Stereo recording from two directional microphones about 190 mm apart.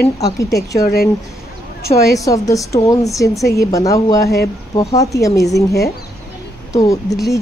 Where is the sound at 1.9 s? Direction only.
15° left (ahead or behind).